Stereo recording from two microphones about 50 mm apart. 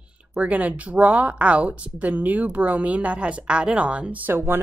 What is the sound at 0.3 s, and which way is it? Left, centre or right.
A woman's voice, right.